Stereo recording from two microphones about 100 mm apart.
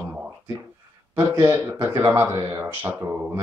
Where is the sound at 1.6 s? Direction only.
20° right (ahead or behind).